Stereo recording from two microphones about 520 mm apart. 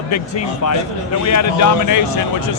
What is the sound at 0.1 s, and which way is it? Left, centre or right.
Speech, left.